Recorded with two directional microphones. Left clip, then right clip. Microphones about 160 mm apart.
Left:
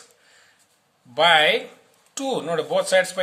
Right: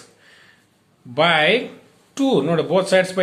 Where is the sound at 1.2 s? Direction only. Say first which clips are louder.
Right 1 dB; 25° left (ahead or behind).